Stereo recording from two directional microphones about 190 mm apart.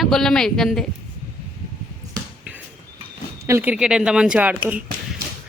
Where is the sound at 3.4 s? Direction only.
10° right (ahead or behind).